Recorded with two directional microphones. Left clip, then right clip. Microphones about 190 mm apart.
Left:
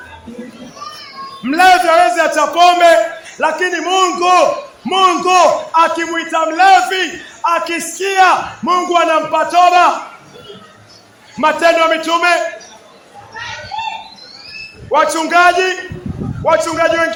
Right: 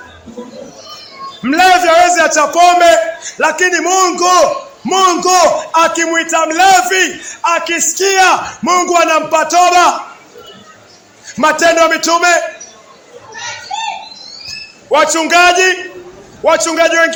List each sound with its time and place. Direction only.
1.4 s a man's voice: 15° right (ahead or behind)
7.9 s a man's voice: 30° right (ahead or behind)
11.3 s a man's voice: 25° right (ahead or behind)
14.8 s a man's voice: 20° right (ahead or behind)